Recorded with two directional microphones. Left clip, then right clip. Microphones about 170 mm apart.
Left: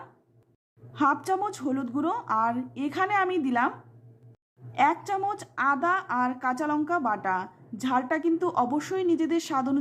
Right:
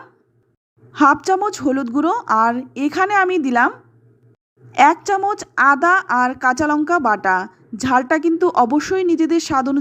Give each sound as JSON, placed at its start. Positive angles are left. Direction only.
{"t": 0.9, "sound": "a woman's voice", "side_deg": -35}
{"t": 4.7, "sound": "a woman's voice", "side_deg": -35}